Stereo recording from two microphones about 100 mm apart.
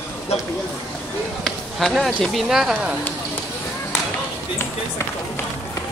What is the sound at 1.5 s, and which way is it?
Speech, centre (ahead or behind).